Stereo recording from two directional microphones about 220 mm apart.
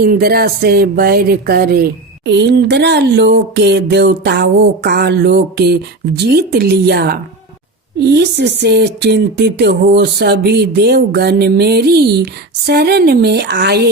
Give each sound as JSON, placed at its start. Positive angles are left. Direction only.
{"t": 0.0, "sound": "speech", "side_deg": -45}